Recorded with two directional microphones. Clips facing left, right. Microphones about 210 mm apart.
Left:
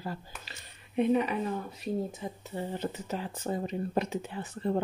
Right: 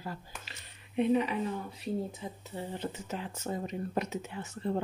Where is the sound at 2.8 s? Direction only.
40° left (ahead or behind).